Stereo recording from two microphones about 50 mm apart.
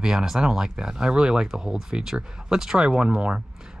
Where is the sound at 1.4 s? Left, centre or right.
Centre.